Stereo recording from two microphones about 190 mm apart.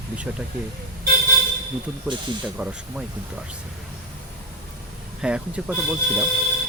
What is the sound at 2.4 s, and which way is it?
Speech, 5° right (ahead or behind).